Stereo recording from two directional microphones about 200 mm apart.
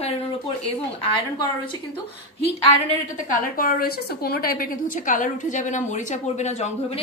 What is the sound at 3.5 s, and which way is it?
A woman's voice, 45° left (ahead or behind).